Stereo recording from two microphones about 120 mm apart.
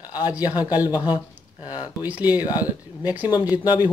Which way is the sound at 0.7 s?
35° left (ahead or behind).